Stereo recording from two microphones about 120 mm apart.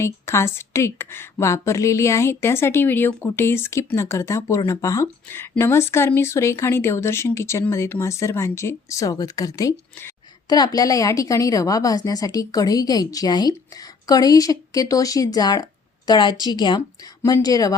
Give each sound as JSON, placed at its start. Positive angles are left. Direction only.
{"t": 0.0, "sound": "a woman's voice", "side_deg": 20}